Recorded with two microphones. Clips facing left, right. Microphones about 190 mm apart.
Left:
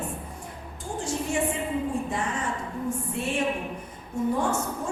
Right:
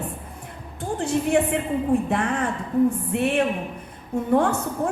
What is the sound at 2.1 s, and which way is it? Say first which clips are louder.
A woman's voice: right 6 dB; 60° right (ahead or behind).